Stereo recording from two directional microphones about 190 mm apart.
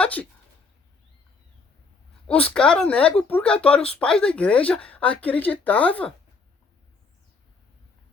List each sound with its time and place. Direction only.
0.0 s speech: 5° left (ahead or behind)
2.2 s speech: 5° left (ahead or behind)